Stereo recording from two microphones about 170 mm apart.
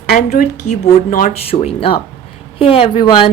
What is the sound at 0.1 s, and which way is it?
Speech, 50° left (ahead or behind).